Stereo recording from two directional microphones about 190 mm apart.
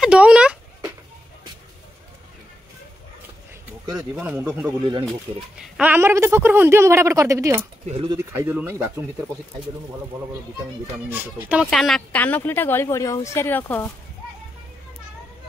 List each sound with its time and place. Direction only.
0.0 s speech: 5° right (ahead or behind)
4.2 s a man's voice: 5° right (ahead or behind)
7.8 s speech: 35° right (ahead or behind)
8.1 s a woman's voice: 15° right (ahead or behind)
11.1 s a woman's voice: 10° right (ahead or behind)
11.6 s a woman's voice: centre (ahead or behind)